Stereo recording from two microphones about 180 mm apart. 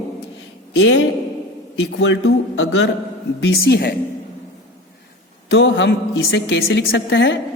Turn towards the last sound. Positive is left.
turn(degrees=80)